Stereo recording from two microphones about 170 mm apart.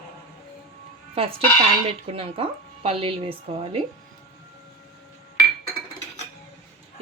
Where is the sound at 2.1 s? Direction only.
35° right (ahead or behind).